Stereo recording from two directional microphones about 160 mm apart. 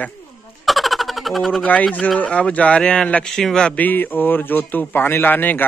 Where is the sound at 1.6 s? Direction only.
10° left (ahead or behind).